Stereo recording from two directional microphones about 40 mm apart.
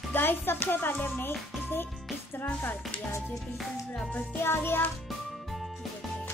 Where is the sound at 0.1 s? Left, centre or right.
Left.